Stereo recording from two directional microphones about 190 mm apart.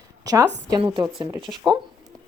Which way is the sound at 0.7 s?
25° right (ahead or behind).